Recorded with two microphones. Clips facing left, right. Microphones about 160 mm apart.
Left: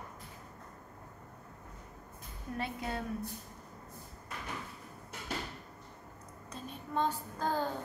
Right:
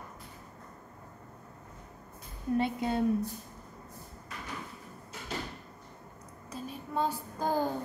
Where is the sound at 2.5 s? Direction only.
25° right (ahead or behind).